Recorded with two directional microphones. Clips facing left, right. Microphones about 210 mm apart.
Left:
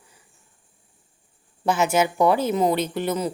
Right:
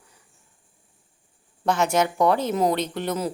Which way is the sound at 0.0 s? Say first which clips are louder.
Left 1 dB; 5° left (ahead or behind).